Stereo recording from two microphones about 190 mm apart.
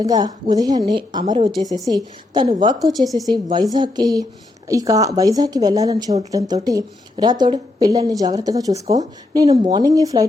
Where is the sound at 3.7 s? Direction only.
20° right (ahead or behind).